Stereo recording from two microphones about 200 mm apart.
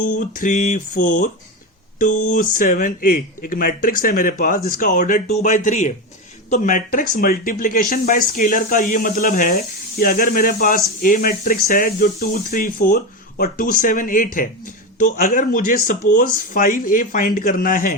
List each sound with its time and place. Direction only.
0.0 s speech: 40° left (ahead or behind)